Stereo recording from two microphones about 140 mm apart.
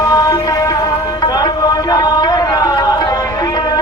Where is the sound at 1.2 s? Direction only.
30° left (ahead or behind).